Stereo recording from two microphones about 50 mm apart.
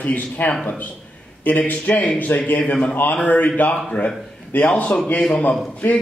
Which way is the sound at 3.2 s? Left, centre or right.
Left.